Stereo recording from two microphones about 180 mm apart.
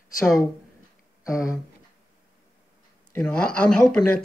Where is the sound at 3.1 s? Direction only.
5° left (ahead or behind).